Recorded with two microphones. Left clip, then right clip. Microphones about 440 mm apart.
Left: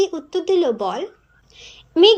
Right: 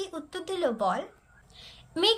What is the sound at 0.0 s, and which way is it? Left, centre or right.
A woman's voice, centre.